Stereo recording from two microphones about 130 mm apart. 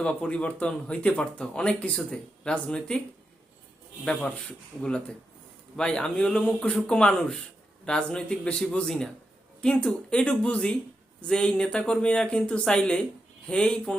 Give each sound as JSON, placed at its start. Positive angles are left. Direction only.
{"t": 0.0, "sound": "speech", "side_deg": 10}
{"t": 4.0, "sound": "speech", "side_deg": 10}